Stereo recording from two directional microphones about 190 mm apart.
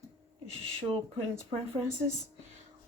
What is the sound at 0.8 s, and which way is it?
Speech, 30° right (ahead or behind).